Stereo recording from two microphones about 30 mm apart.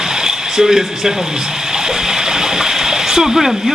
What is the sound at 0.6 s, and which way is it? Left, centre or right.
Speech, centre.